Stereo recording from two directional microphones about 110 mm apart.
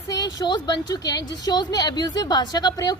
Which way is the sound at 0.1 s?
35° left (ahead or behind).